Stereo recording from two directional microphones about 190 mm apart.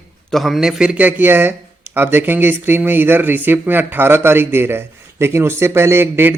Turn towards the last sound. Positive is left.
turn(degrees=-10)  # may be behind; listen again after turning